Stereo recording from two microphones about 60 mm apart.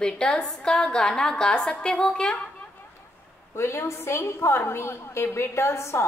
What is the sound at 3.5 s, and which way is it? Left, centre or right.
A woman's voice, left.